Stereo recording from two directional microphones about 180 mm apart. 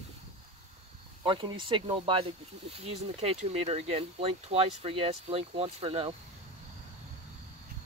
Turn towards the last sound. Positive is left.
turn(degrees=-30)  # may be behind; listen again after turning